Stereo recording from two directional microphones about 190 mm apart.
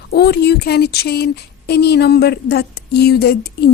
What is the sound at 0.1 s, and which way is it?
Speech, 60° left (ahead or behind).